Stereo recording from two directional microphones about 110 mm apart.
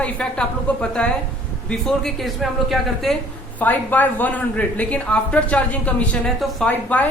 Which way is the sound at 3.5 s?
15° left (ahead or behind).